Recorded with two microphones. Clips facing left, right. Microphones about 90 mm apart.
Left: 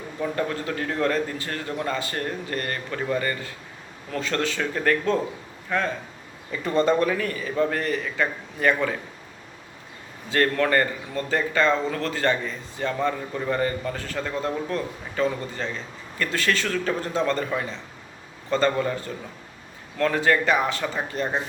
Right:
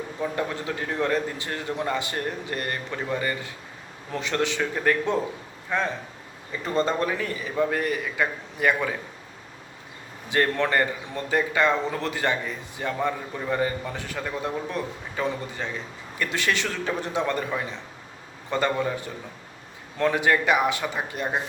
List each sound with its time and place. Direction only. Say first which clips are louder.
0.2 s a man's voice: left 2 dB; 20° right (ahead or behind)
10.2 s a man's voice: left 2 dB; 15° right (ahead or behind)